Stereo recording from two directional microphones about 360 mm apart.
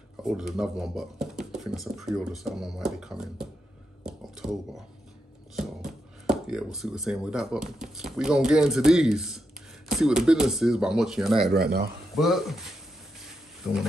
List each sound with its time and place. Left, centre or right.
0.2 s speech: centre
4.0 s a sound: centre
5.6 s speech: centre
11.5 s speech: right
12.2 s speech: centre